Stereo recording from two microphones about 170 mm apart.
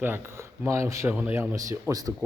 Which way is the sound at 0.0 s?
15° right (ahead or behind).